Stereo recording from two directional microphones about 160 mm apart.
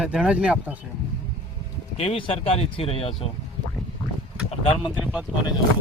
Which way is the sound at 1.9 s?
35° left (ahead or behind).